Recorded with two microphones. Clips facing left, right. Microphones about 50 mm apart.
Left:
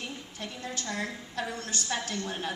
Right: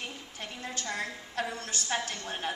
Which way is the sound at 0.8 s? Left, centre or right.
Right.